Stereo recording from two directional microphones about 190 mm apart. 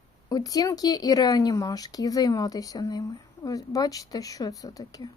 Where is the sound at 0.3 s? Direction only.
20° left (ahead or behind).